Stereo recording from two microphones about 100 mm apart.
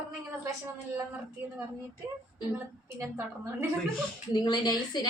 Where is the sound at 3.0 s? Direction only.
25° right (ahead or behind).